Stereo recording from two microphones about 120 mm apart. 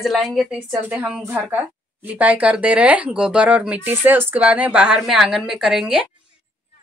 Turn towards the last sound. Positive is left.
turn(degrees=-5)  # may be behind; listen again after turning